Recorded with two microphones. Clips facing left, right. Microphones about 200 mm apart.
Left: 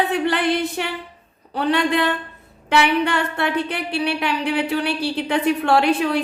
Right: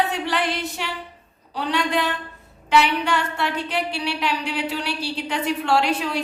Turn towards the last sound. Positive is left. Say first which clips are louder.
# left 4 dB
turn(degrees=55)  # may be behind; listen again after turning